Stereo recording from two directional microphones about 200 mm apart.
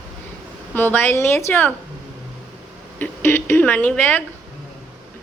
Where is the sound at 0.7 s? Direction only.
10° left (ahead or behind).